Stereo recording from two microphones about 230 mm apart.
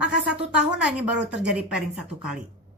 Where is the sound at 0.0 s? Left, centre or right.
Centre.